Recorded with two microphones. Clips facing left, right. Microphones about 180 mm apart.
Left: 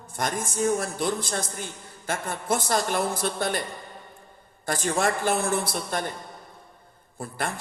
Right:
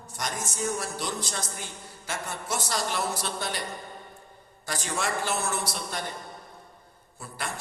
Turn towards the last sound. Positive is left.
turn(degrees=55)  # may be behind; listen again after turning